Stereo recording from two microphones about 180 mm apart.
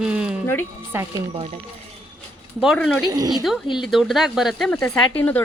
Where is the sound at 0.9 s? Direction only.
10° right (ahead or behind).